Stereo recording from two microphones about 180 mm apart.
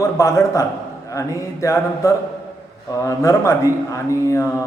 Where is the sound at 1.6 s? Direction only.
15° left (ahead or behind).